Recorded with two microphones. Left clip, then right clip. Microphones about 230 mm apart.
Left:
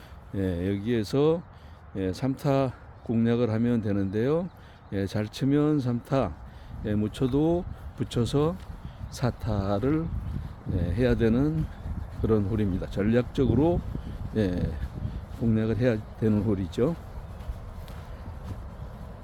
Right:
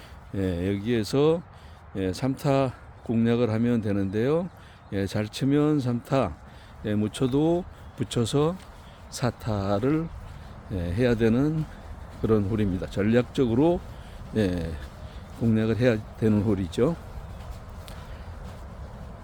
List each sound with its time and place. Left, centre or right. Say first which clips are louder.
0.3 s speech: right 1 dB; centre